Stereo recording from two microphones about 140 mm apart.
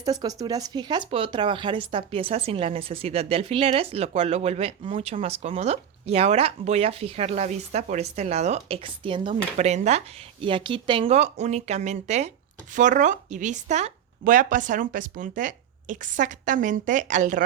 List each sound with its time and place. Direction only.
0.0 s speech: 25° right (ahead or behind); by 4.9 s 40° right (ahead or behind)
4.9 s speech: 55° right (ahead or behind); by 9.3 s 35° right (ahead or behind)
9.3 s speech: 55° right (ahead or behind)
10.4 s speech: 35° right (ahead or behind); by 12.3 s 55° right (ahead or behind)
12.7 s speech: 65° right (ahead or behind)
14.3 s speech: 70° right (ahead or behind)